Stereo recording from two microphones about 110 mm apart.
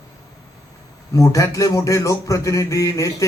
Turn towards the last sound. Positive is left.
turn(degrees=30)  # may be behind; listen again after turning